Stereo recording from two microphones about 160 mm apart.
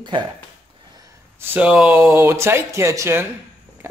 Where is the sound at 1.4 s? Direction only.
10° right (ahead or behind).